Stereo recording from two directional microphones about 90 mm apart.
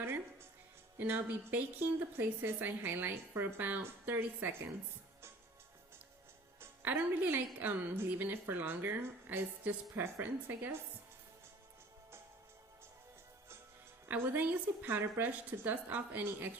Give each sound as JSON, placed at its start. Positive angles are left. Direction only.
{"t": 0.0, "sound": "music", "side_deg": -25}
{"t": 0.9, "sound": "a woman's voice", "side_deg": -20}
{"t": 6.6, "sound": "a woman's voice", "side_deg": -25}
{"t": 14.1, "sound": "a woman's voice", "side_deg": -15}